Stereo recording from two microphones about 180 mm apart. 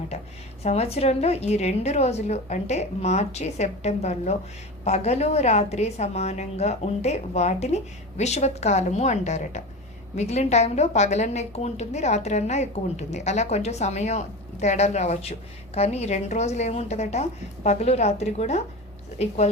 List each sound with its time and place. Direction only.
0.6 s a woman's voice: 35° left (ahead or behind)